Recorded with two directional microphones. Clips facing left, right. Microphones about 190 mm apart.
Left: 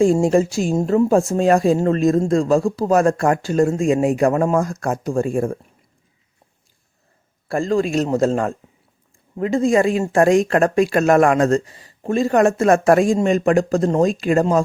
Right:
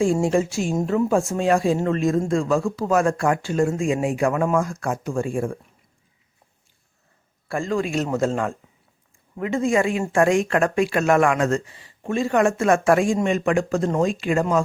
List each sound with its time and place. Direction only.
0.0 s speech: 40° left (ahead or behind)
7.4 s speech: 35° left (ahead or behind)